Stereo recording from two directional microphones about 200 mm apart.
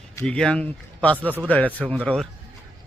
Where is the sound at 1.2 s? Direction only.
10° right (ahead or behind).